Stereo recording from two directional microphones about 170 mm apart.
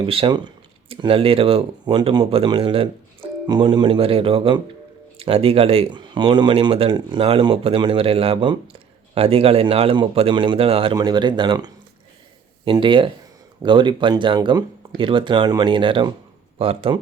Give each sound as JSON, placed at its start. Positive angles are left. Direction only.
{"t": 0.0, "sound": "speech", "side_deg": -30}